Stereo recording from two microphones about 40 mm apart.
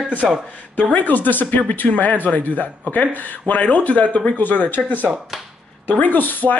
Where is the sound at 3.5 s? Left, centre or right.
Left.